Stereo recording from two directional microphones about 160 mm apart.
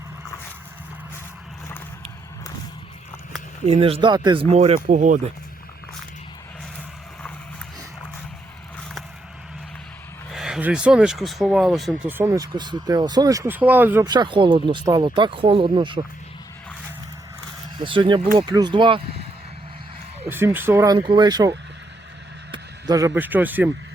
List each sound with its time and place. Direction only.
3.7 s speech: 35° right (ahead or behind)
4.4 s speech: 40° right (ahead or behind)
10.3 s speech: 5° right (ahead or behind)
12.0 s speech: 15° right (ahead or behind)
14.0 s speech: 25° right (ahead or behind)
17.7 s speech: 30° right (ahead or behind)
20.3 s speech: 15° right (ahead or behind)
22.5 s speech: 20° right (ahead or behind)